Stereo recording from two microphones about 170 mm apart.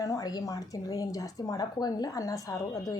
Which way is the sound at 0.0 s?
20° left (ahead or behind).